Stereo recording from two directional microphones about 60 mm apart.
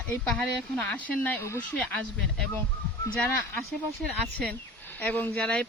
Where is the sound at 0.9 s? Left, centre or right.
Left.